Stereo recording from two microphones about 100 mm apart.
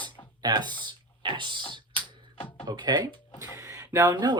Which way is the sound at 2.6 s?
45° right (ahead or behind).